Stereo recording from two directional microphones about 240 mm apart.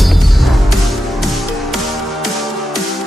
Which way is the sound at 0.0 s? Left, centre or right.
Centre.